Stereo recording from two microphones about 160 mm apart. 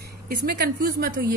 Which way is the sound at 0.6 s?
70° right (ahead or behind).